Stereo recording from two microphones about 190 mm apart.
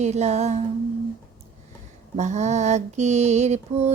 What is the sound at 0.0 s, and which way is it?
Mantra, 35° right (ahead or behind).